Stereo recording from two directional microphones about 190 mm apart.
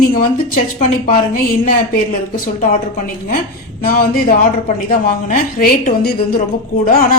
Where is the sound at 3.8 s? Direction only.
50° left (ahead or behind).